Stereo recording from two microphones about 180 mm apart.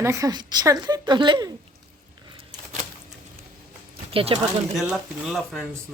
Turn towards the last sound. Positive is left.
turn(degrees=0)  # may be behind; listen again after turning